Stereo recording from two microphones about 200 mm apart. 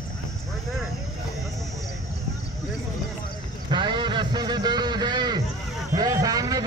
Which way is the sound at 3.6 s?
25° right (ahead or behind).